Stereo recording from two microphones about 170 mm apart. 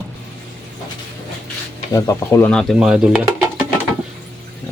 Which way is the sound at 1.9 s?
20° left (ahead or behind).